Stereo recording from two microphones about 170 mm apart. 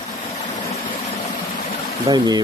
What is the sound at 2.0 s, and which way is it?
Speech, 25° right (ahead or behind).